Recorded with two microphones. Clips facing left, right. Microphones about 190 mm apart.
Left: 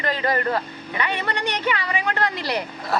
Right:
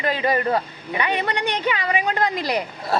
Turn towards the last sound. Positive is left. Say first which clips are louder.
# right 2 dB
turn(degrees=-30)  # may be behind; listen again after turning